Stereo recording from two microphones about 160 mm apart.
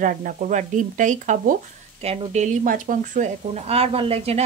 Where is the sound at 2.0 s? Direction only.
40° right (ahead or behind).